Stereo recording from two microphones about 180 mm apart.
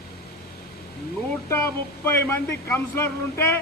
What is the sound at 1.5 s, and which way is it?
Speech, 15° left (ahead or behind).